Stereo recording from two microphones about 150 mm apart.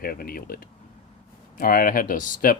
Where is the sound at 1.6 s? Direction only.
70° left (ahead or behind).